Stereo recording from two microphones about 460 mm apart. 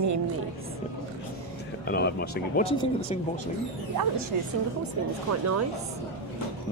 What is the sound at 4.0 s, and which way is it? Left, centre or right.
Speech, right.